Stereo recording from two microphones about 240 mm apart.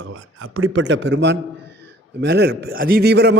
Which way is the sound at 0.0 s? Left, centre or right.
Right.